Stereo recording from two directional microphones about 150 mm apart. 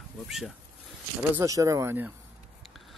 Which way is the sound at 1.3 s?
20° right (ahead or behind).